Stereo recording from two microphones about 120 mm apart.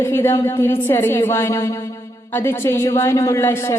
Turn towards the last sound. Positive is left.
turn(degrees=20)  # may be behind; listen again after turning